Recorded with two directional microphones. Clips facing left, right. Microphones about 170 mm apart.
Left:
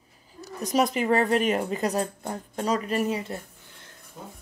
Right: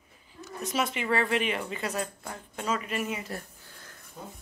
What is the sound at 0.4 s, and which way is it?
Speech, 35° left (ahead or behind).